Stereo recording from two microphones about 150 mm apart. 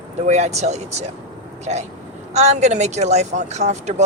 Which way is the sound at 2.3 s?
50° right (ahead or behind).